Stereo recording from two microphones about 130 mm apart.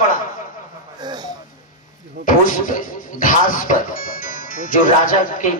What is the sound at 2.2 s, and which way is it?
Speech, 90° left.